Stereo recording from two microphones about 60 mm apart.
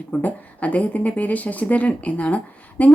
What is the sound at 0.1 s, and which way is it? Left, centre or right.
Speech, left.